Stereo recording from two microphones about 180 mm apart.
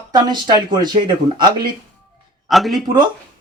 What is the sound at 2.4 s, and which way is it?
Speech, centre (ahead or behind).